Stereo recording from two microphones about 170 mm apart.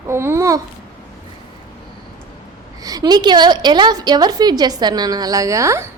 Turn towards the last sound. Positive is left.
turn(degrees=-15)  # may be behind; listen again after turning